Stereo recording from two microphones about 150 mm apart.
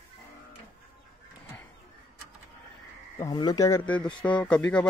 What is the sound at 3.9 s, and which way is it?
Speech, 10° left (ahead or behind).